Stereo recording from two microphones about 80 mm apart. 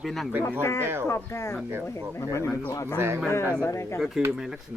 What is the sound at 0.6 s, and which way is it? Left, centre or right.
Speech, left.